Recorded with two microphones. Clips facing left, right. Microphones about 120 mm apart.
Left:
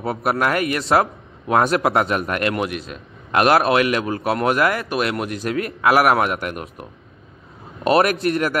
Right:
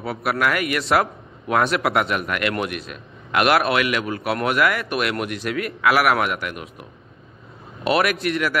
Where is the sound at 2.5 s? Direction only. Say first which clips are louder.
Left 2 dB; 25° left (ahead or behind).